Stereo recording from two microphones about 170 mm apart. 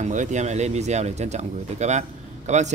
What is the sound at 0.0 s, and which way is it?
Speech, 45° right (ahead or behind).